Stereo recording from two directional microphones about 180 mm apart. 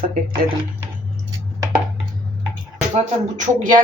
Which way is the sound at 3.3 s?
45° right (ahead or behind).